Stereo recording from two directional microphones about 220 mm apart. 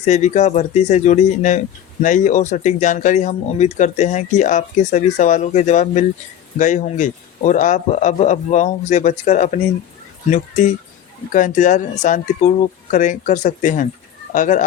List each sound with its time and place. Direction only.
0.0 s speech: 30° left (ahead or behind)